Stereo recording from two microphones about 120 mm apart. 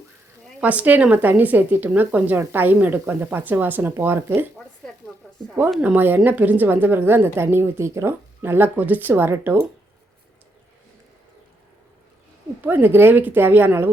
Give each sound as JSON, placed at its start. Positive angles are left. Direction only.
{"t": 0.6, "sound": "a woman's voice", "side_deg": -10}
{"t": 5.8, "sound": "a woman's voice", "side_deg": -15}
{"t": 12.6, "sound": "a woman's voice", "side_deg": -15}